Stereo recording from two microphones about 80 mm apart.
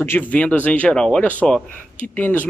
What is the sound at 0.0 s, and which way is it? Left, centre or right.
Speech, left.